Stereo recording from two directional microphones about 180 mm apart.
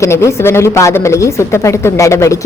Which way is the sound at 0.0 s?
15° left (ahead or behind).